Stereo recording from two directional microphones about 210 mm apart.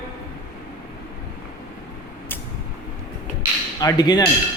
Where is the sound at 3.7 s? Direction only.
20° left (ahead or behind).